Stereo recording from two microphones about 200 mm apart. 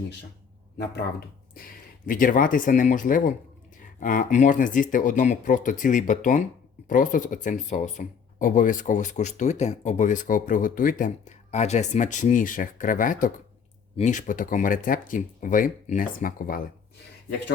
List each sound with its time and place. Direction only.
1.5 s speech: 45° left (ahead or behind)